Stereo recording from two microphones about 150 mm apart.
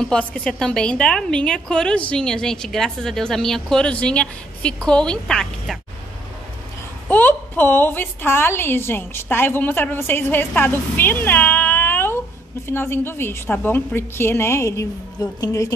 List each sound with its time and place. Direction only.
0.0 s a woman's voice: 5° left (ahead or behind)
7.1 s a woman's voice: 10° left (ahead or behind)